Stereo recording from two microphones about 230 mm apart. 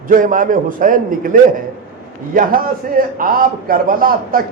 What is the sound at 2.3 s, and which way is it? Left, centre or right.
A man's voice, right.